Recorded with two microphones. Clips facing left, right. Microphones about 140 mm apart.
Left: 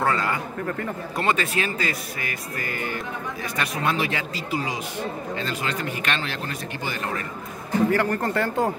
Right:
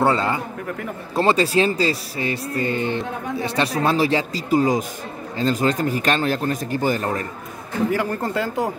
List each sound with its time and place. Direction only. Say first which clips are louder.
0.0 s a man's voice: right 5 dB; 25° right (ahead or behind)
7.9 s speech: even; 15° right (ahead or behind)